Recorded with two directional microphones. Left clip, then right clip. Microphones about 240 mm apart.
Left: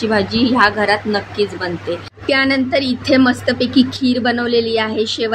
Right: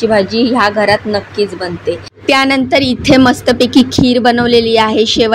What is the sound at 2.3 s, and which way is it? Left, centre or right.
A woman's voice, right.